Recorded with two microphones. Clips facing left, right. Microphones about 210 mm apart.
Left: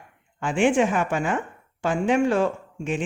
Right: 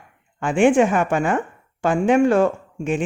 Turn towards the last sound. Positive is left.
turn(degrees=-50)  # may be behind; listen again after turning